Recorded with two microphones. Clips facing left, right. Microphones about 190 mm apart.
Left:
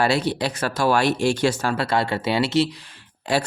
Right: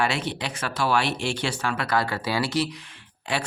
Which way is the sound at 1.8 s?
25° left (ahead or behind).